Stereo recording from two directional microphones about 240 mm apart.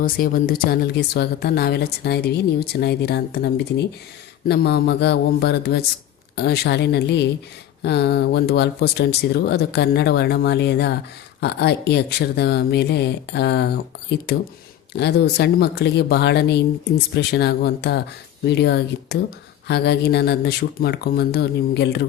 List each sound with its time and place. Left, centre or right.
0.0 s a woman's voice: left
14.9 s speech: left